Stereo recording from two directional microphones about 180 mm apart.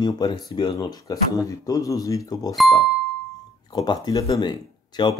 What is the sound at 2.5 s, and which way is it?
Speech, centre (ahead or behind).